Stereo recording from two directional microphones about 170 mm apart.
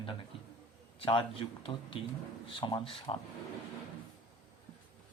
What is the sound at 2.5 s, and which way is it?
Speech, 25° left (ahead or behind).